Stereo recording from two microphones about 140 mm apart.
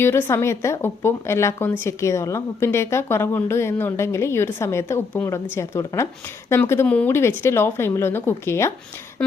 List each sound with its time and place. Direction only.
0.0 s a woman's voice: 20° left (ahead or behind)